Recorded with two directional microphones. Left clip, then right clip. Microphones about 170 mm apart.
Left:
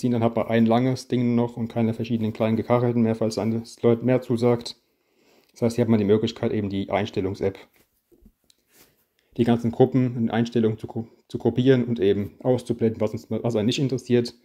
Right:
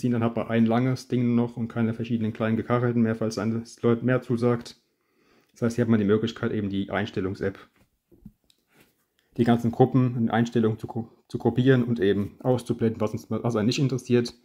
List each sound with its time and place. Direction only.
0.0 s speech: 15° left (ahead or behind)
9.3 s speech: 10° left (ahead or behind)